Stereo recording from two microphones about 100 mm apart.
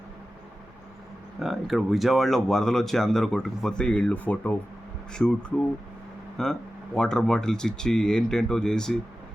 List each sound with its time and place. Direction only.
1.4 s speech: centre (ahead or behind)